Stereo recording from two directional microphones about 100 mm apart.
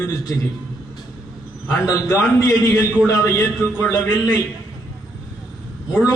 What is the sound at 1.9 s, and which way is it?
A man's voice, 30° left (ahead or behind).